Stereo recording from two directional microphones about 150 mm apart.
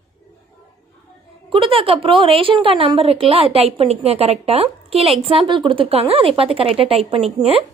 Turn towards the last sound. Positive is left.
turn(degrees=-40)  # may be behind; listen again after turning